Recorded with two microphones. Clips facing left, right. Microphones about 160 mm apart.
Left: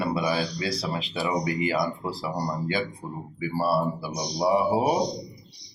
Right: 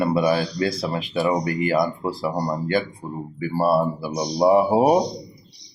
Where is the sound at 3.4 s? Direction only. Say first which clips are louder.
Right 5 dB; 50° right (ahead or behind).